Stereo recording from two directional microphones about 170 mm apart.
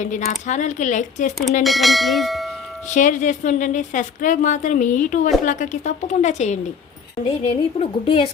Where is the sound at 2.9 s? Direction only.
45° left (ahead or behind).